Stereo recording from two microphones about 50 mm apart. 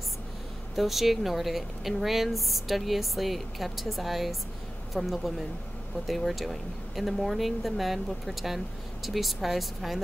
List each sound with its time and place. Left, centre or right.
0.7 s a woman's voice: centre